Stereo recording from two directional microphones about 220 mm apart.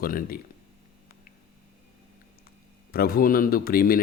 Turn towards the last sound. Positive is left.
turn(degrees=40)  # may be behind; listen again after turning